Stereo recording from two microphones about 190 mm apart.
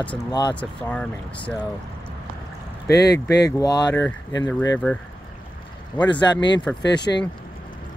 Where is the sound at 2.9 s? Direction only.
60° left (ahead or behind).